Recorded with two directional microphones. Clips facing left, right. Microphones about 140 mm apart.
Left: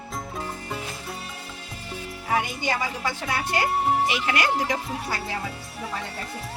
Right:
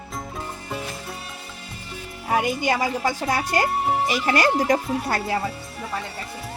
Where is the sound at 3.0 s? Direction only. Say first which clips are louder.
Right 4 dB; 40° right (ahead or behind).